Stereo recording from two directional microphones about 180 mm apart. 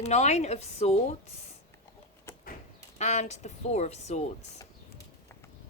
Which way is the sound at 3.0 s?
40° left (ahead or behind).